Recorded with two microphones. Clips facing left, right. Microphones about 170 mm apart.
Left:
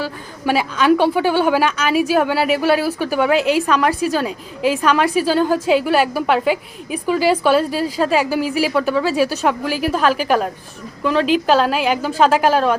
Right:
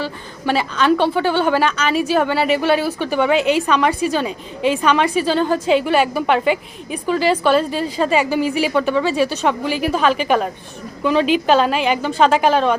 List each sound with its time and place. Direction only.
0.0 s a woman's voice: 10° left (ahead or behind)